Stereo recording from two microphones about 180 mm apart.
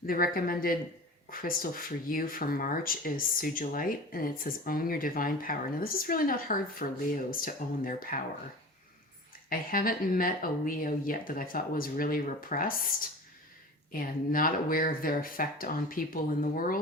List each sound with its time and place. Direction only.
0.0 s speech: 55° left (ahead or behind)
9.5 s speech: 55° left (ahead or behind)